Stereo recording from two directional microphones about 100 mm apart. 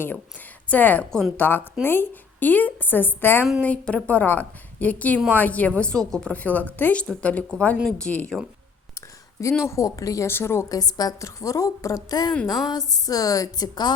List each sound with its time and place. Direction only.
0.7 s a woman's voice: 15° left (ahead or behind)
9.0 s a woman's voice: 30° left (ahead or behind)
10.8 s a woman's voice: 40° left (ahead or behind)